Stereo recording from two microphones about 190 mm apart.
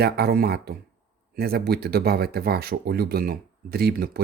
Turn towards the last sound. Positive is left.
turn(degrees=-55)  # may be behind; listen again after turning